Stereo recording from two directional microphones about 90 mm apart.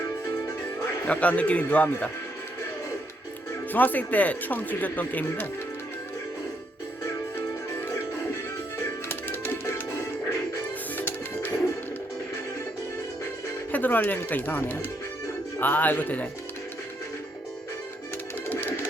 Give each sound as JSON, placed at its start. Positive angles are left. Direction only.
{"t": 1.0, "sound": "a man's voice", "side_deg": 15}
{"t": 3.7, "sound": "speech", "side_deg": 20}
{"t": 9.0, "sound": "music", "side_deg": 25}
{"t": 13.7, "sound": "speech", "side_deg": 20}